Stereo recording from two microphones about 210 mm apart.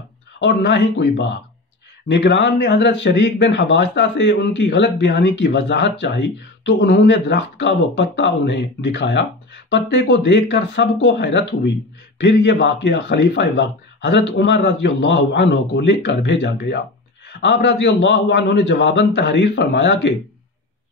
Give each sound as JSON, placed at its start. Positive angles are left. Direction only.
{"t": 0.4, "sound": "speech", "side_deg": 55}